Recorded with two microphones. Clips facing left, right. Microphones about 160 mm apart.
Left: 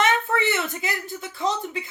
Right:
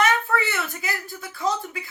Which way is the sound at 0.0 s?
20° left (ahead or behind).